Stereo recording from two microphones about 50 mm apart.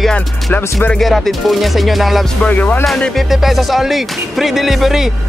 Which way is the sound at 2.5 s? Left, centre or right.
Left.